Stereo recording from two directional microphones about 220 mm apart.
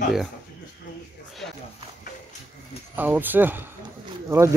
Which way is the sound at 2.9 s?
10° right (ahead or behind).